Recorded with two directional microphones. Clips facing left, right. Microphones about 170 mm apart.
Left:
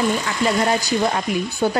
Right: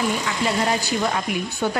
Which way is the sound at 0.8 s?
40° left (ahead or behind).